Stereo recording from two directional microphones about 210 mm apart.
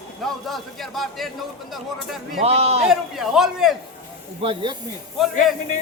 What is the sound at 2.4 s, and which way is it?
Speech, 30° right (ahead or behind).